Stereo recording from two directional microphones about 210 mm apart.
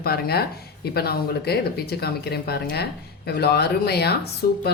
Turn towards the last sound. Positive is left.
turn(degrees=45)  # may be behind; listen again after turning